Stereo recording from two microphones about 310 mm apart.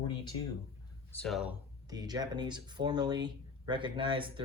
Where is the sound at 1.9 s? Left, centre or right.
Centre.